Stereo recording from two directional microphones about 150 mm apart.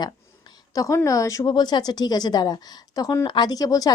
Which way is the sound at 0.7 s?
20° left (ahead or behind).